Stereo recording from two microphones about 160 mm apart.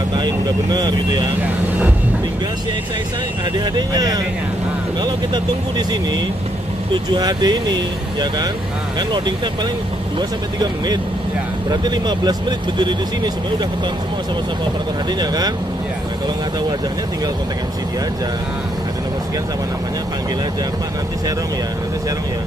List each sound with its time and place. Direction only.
0.2 s speech: 25° right (ahead or behind)
3.7 s speech: 25° right (ahead or behind)
7.1 s speech: 25° right (ahead or behind)
11.7 s speech: 25° right (ahead or behind)
15.1 s speech: 25° right (ahead or behind)